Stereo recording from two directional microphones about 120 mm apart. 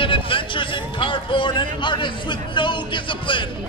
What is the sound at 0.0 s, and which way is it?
Speech, 45° left (ahead or behind).